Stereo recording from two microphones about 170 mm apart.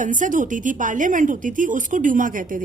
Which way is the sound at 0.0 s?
50° right (ahead or behind).